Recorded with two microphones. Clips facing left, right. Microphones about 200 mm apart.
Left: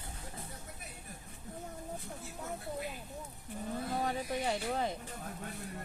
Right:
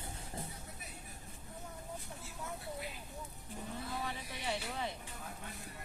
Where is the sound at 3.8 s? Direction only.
45° left (ahead or behind).